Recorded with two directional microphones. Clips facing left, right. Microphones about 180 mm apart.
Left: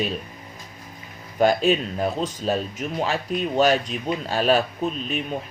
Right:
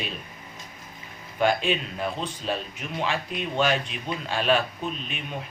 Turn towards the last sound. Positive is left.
turn(degrees=40)  # may be behind; listen again after turning